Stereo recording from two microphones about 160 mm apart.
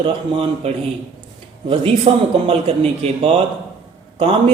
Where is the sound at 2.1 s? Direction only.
30° right (ahead or behind).